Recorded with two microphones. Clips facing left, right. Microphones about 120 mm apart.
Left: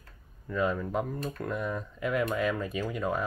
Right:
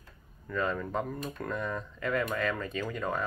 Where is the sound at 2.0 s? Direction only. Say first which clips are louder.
Left 2 dB; 10° left (ahead or behind).